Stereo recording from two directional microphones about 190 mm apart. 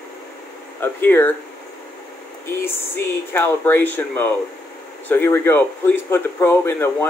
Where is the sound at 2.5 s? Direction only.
10° left (ahead or behind).